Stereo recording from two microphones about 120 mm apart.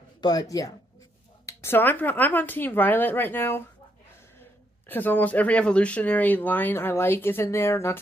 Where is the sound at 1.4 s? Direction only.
20° left (ahead or behind).